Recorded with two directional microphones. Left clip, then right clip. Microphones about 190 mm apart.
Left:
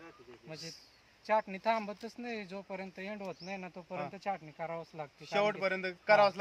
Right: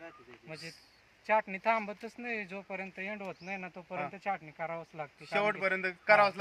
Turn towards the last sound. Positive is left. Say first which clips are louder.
# right 1 dB
turn(degrees=20)  # may be behind; listen again after turning